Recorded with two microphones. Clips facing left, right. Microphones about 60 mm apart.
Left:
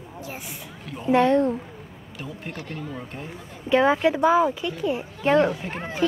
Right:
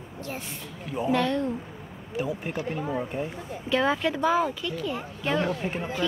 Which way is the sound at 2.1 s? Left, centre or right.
Centre.